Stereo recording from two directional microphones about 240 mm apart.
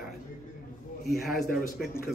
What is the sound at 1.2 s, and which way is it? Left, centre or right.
Speech, centre.